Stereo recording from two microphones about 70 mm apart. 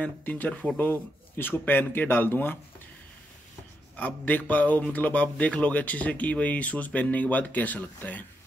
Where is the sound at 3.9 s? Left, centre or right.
Left.